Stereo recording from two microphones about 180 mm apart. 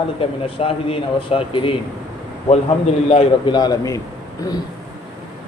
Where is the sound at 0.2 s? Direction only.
30° left (ahead or behind).